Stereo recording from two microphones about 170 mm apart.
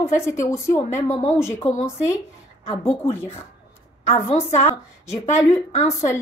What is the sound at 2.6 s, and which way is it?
Speech, 15° left (ahead or behind).